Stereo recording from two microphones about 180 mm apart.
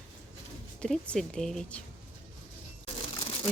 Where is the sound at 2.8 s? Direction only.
30° left (ahead or behind).